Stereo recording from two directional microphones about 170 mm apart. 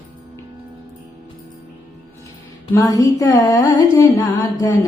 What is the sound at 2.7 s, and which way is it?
Music, 20° left (ahead or behind).